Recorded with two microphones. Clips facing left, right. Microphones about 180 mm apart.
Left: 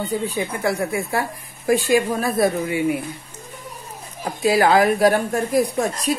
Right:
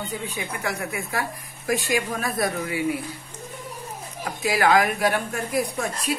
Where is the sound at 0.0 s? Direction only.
35° left (ahead or behind).